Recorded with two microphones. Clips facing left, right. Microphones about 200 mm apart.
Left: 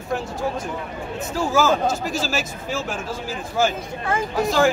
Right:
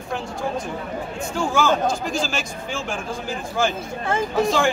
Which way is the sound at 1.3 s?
5° left (ahead or behind).